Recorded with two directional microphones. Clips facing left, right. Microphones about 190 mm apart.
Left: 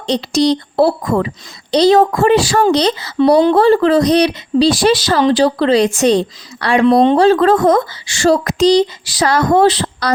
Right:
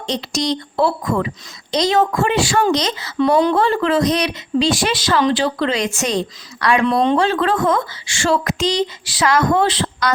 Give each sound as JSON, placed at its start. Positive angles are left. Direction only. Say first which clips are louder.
{"t": 0.0, "sound": "speech", "louder": "left 8 dB", "side_deg": 35}